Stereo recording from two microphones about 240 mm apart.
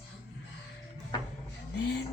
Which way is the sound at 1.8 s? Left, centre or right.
Left.